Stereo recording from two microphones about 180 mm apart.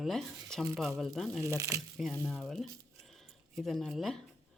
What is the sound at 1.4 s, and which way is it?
Speech, 20° right (ahead or behind).